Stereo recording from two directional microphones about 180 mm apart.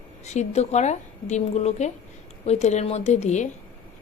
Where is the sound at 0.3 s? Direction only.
40° left (ahead or behind).